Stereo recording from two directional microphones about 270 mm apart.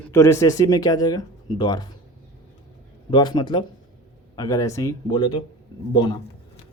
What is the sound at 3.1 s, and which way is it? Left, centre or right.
A man's voice, centre.